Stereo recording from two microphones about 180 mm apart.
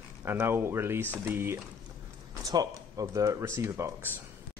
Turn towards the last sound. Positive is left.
turn(degrees=-15)  # may be behind; listen again after turning